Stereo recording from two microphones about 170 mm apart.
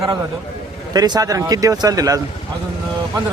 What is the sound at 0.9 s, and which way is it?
Speech, 25° right (ahead or behind).